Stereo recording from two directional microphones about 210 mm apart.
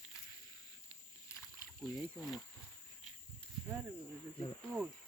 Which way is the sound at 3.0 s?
5° right (ahead or behind).